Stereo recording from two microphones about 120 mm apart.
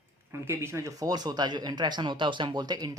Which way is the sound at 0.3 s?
20° right (ahead or behind).